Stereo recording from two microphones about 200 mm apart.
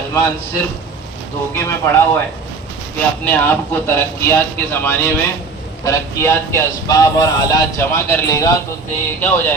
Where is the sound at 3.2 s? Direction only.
10° left (ahead or behind).